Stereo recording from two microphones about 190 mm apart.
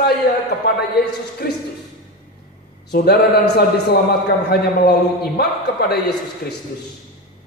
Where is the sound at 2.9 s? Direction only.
60° left (ahead or behind).